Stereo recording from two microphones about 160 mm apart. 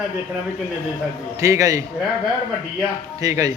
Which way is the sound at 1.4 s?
20° right (ahead or behind).